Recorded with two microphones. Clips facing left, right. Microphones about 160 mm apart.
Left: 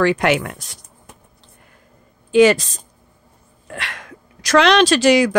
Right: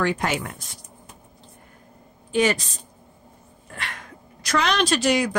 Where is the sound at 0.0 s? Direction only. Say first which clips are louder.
Left 7 dB; 85° left.